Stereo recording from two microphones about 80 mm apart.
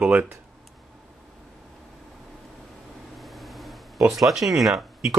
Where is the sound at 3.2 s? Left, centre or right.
Centre.